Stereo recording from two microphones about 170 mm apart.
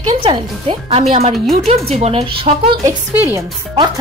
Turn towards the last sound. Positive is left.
turn(degrees=-25)  # may be behind; listen again after turning